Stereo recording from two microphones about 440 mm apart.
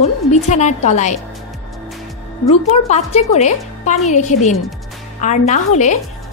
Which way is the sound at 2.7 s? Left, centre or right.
Centre.